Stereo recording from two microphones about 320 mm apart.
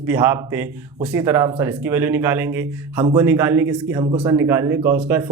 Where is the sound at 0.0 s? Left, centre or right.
Centre.